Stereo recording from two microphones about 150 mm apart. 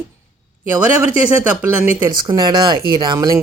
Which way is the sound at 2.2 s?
25° right (ahead or behind).